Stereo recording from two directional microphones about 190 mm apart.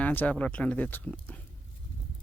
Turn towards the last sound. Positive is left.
turn(degrees=10)  # may be behind; listen again after turning